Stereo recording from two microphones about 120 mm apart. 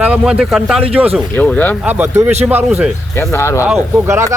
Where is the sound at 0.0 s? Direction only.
10° right (ahead or behind).